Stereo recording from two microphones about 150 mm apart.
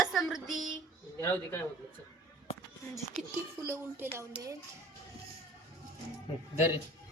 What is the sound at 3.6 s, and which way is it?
Speech, 20° right (ahead or behind).